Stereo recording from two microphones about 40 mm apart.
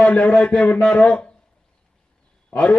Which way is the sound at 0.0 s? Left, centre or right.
Left.